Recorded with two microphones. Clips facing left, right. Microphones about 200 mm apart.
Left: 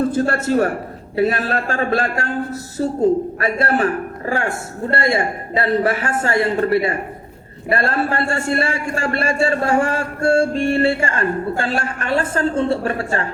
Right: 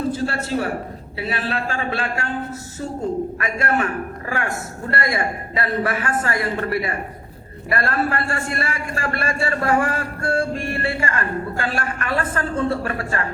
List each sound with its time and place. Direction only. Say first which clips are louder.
0.1 s a man's voice: left 5 dB; 50° left (ahead or behind); by 13.2 s 25° left (ahead or behind)